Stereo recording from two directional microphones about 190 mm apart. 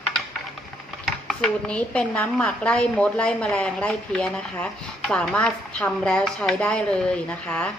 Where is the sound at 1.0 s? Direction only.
Centre (ahead or behind).